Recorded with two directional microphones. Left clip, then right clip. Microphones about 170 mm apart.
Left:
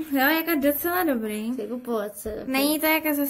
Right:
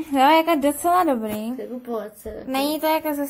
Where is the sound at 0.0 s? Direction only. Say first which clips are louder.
Right 7 dB; 20° right (ahead or behind).